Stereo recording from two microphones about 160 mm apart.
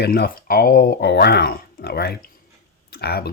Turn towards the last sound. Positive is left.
turn(degrees=85)